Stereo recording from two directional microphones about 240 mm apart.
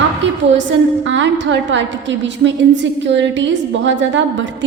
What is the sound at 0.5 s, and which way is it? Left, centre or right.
A woman's voice, right.